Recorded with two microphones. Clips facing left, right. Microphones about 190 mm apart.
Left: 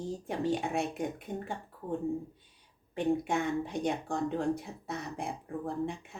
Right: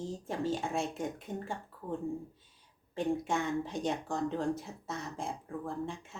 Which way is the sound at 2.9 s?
60° left (ahead or behind).